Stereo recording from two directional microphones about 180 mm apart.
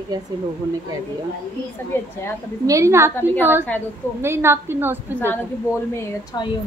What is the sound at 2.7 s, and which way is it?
Speech, 15° right (ahead or behind).